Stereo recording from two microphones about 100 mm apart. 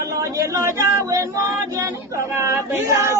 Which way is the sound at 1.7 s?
30° right (ahead or behind).